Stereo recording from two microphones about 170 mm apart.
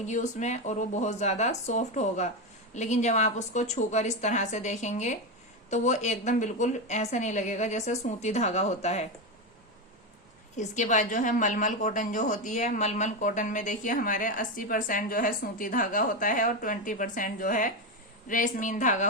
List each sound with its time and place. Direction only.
0.0 s a woman's voice: 45° left (ahead or behind)
10.6 s a woman's voice: 45° left (ahead or behind)